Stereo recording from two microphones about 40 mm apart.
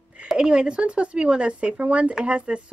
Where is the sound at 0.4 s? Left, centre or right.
Right.